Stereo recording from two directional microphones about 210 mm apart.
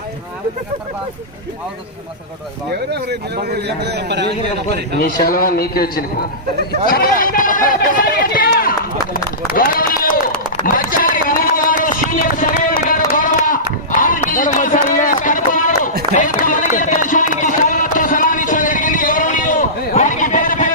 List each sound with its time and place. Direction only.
2.6 s a man's voice: 50° right (ahead or behind)
4.9 s a man's voice: 45° left (ahead or behind)
9.1 s run: 40° left (ahead or behind)
10.7 s a sound: 40° left (ahead or behind)
12.9 s run: 40° left (ahead or behind)
16.1 s a sound: 40° left (ahead or behind)